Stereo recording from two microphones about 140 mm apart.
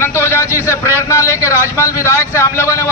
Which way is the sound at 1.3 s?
15° right (ahead or behind).